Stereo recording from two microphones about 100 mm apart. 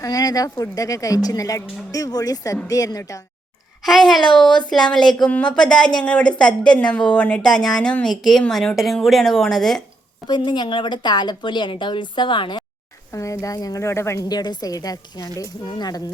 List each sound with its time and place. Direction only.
0.0 s speech: 40° left (ahead or behind)
3.8 s a woman's voice: centre (ahead or behind)
10.2 s a woman's voice: 50° left (ahead or behind)
13.1 s speech: 30° left (ahead or behind)
14.3 s speech: 45° left (ahead or behind)